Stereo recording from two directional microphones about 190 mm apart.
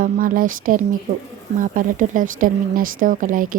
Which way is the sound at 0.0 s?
45° right (ahead or behind).